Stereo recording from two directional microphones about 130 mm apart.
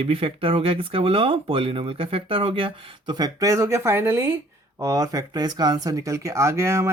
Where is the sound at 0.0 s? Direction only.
45° right (ahead or behind).